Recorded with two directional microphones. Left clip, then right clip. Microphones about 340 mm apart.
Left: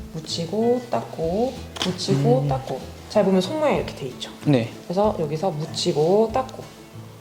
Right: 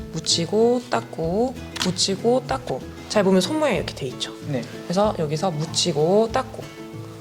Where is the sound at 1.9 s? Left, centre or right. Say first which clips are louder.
Right 1 dB; right.